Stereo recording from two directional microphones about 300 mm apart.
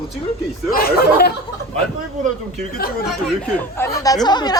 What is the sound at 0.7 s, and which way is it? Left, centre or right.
Speech, left.